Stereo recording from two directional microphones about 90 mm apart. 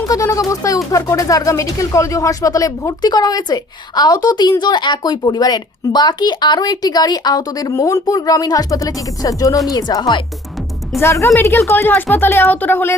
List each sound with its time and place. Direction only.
0.1 s speech: 40° left (ahead or behind); by 10.2 s 60° left (ahead or behind)
11.0 s speech: 30° left (ahead or behind)